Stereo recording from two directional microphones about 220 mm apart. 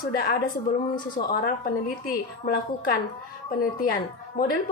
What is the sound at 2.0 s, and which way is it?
Speech, 40° left (ahead or behind).